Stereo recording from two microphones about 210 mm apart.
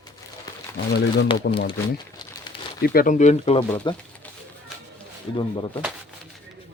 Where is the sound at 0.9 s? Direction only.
50° left (ahead or behind).